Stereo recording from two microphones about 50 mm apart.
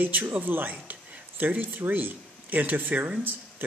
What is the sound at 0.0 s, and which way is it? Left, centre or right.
Speech, right.